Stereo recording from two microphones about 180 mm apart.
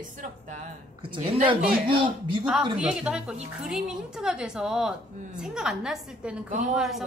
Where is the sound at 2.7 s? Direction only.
5° right (ahead or behind).